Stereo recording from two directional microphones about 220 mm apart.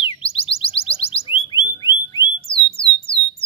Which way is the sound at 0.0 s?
25° left (ahead or behind).